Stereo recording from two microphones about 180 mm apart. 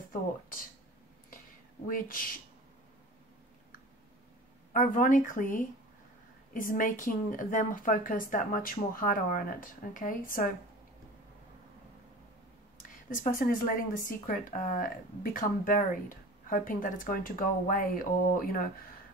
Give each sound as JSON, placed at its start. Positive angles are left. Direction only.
{"t": 0.1, "sound": "a woman's voice", "side_deg": 50}
{"t": 1.9, "sound": "a woman's voice", "side_deg": 50}
{"t": 4.7, "sound": "a woman's voice", "side_deg": 50}
{"t": 13.1, "sound": "a woman's voice", "side_deg": 50}